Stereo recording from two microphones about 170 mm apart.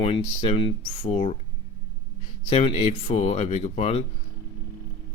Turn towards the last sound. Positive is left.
turn(degrees=40)  # may be behind; listen again after turning